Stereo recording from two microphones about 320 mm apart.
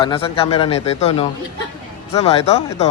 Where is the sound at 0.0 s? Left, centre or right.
Centre.